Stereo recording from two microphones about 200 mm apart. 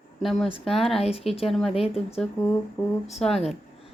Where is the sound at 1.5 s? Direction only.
Centre (ahead or behind).